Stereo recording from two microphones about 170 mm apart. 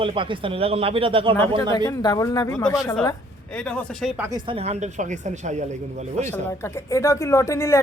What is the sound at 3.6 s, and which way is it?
Speech, 5° left (ahead or behind).